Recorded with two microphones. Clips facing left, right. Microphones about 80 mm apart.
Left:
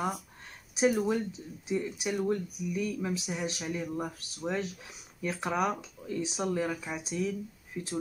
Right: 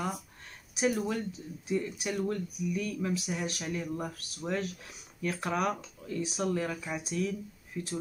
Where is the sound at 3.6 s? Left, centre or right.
Centre.